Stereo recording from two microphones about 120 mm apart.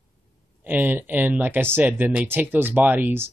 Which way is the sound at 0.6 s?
15° right (ahead or behind).